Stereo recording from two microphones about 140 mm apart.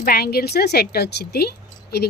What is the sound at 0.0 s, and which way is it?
Speech, 90° left.